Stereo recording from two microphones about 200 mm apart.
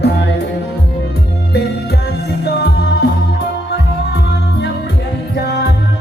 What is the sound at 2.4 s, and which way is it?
Music, 55° left (ahead or behind).